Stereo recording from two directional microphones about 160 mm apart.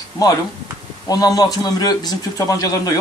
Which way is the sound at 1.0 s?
25° left (ahead or behind).